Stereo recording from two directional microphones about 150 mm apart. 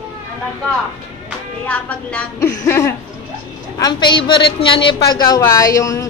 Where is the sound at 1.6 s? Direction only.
10° left (ahead or behind).